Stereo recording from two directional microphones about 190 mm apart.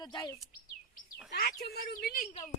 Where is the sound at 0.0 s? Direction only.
20° left (ahead or behind).